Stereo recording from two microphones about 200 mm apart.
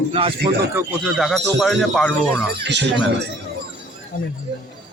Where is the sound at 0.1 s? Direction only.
25° right (ahead or behind).